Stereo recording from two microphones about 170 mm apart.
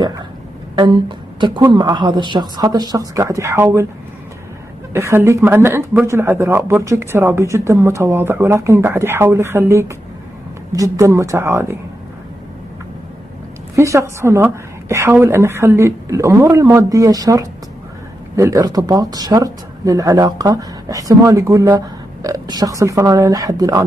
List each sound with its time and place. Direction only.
0.7 s speech: 30° right (ahead or behind)
4.9 s speech: 15° right (ahead or behind)
13.7 s speech: 15° right (ahead or behind)